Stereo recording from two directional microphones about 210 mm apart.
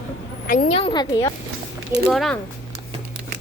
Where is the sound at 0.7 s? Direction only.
25° left (ahead or behind).